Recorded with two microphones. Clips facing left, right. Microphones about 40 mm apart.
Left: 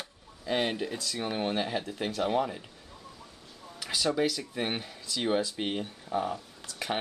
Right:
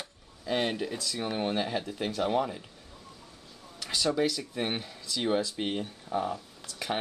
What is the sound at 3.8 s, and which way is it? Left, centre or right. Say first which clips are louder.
Speech: even; centre.